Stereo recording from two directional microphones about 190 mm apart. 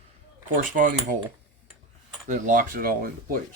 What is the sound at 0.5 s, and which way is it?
Speech, 45° right (ahead or behind).